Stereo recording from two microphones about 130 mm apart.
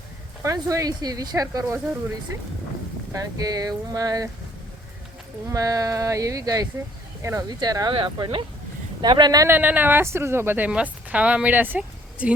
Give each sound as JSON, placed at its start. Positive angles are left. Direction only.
{"t": 0.4, "sound": "speech", "side_deg": -25}
{"t": 3.1, "sound": "speech", "side_deg": -25}
{"t": 5.5, "sound": "speech", "side_deg": -25}
{"t": 7.9, "sound": "speech", "side_deg": -40}
{"t": 9.5, "sound": "a woman's voice", "side_deg": -15}